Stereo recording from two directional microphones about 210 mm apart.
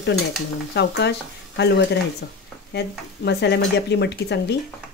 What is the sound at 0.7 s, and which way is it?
Speech, 55° left (ahead or behind).